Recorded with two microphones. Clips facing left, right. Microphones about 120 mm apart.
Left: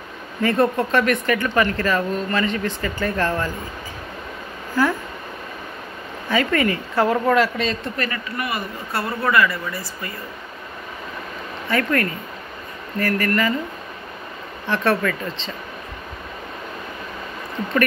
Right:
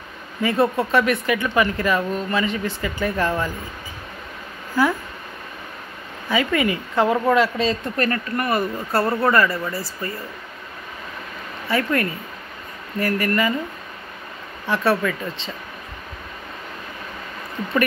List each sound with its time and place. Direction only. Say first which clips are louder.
0.4 s speech: left 1 dB; 10° right (ahead or behind)
6.3 s speech: left 1 dB; 15° right (ahead or behind)
8.0 s speech: right 4 dB; 45° right (ahead or behind)
11.7 s speech: even; 20° right (ahead or behind)
14.7 s speech: even; 10° right (ahead or behind)